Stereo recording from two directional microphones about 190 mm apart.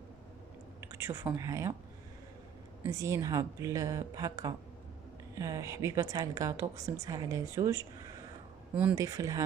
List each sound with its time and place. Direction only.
0.7 s a woman's voice: 15° right (ahead or behind)
2.9 s a woman's voice: 20° right (ahead or behind)
8.9 s a woman's voice: 15° right (ahead or behind)